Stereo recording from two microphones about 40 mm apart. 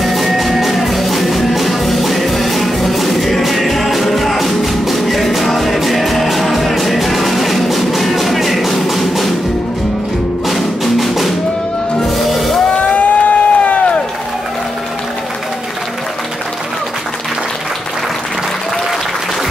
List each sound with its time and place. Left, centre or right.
0.0 s music: centre
10.5 s music: centre
12.7 s a sound: left